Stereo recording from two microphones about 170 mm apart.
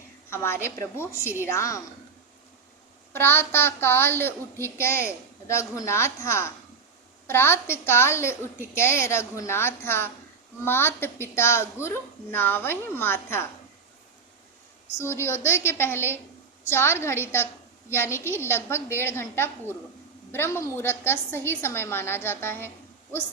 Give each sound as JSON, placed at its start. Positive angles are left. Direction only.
{"t": 0.3, "sound": "a woman's voice", "side_deg": 15}
{"t": 3.1, "sound": "a woman's voice", "side_deg": 15}
{"t": 14.9, "sound": "a woman's voice", "side_deg": 15}